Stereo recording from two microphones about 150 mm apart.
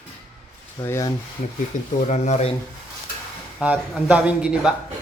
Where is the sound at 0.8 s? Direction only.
20° left (ahead or behind).